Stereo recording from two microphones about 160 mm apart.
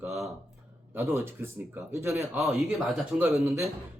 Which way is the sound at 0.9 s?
15° right (ahead or behind).